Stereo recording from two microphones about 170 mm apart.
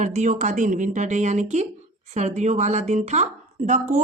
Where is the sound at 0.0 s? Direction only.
45° right (ahead or behind).